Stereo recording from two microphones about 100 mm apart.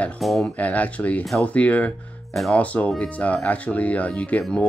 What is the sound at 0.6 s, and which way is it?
Speech, 15° left (ahead or behind).